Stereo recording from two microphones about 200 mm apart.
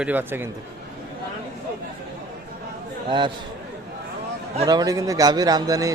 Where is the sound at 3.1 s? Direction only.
25° right (ahead or behind).